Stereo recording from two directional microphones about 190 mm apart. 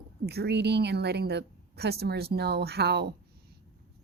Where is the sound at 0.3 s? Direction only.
60° right (ahead or behind).